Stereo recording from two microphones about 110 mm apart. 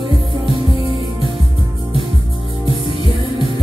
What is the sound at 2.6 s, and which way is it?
Music, 50° left (ahead or behind).